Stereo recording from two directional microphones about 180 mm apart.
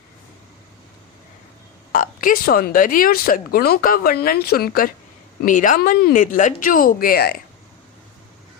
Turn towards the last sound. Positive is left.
turn(degrees=55)  # may be behind; listen again after turning